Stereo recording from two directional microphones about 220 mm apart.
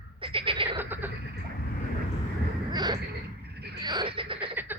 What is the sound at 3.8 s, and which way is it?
Frog, 20° right (ahead or behind).